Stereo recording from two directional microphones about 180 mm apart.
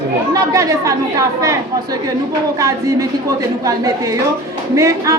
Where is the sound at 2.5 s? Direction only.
20° right (ahead or behind).